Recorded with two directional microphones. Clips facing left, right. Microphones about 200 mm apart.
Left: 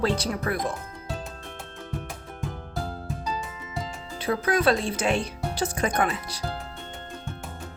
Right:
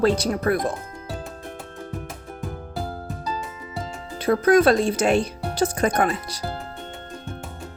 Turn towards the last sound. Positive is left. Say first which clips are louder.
# right 4 dB
turn(degrees=-40)  # may be behind; listen again after turning